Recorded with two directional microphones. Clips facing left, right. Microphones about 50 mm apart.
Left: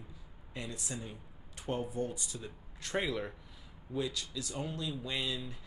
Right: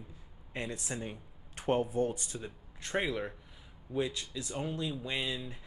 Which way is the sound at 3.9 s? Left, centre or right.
Right.